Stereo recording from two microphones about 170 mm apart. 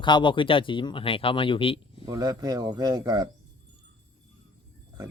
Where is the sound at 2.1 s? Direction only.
25° right (ahead or behind).